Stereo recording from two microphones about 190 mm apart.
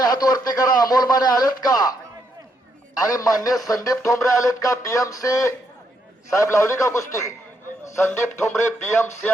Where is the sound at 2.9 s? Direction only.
20° left (ahead or behind).